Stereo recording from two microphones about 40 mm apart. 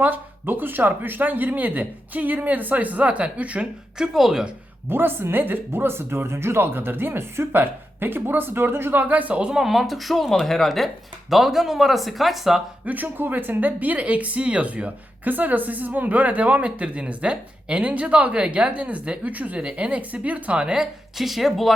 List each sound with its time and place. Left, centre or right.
0.0 s speech: right
3.9 s speech: centre
4.9 s speech: right
9.0 s speech: right
9.6 s speech: centre
12.8 s speech: right
13.1 s speech: right
15.2 s speech: right
20.6 s speech: right
21.2 s speech: centre